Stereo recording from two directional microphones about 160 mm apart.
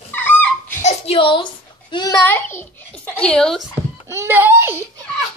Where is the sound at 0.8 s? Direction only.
40° left (ahead or behind); by 3.6 s 5° left (ahead or behind).